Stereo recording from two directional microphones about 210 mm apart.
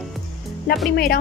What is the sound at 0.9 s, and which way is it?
Speech, 45° left (ahead or behind).